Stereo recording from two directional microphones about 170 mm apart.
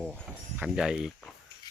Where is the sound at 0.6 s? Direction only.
5° right (ahead or behind).